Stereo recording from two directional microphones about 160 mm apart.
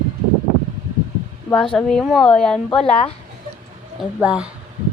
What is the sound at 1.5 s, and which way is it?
Child singing, 5° left (ahead or behind).